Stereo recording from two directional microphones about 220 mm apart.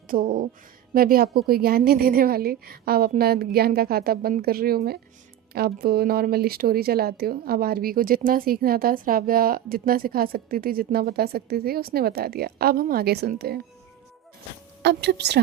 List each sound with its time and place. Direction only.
0.1 s speech: 40° right (ahead or behind)
14.8 s speech: 50° right (ahead or behind)